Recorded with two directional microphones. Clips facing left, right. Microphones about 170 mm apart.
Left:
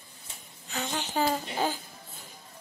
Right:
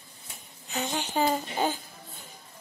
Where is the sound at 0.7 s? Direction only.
15° right (ahead or behind).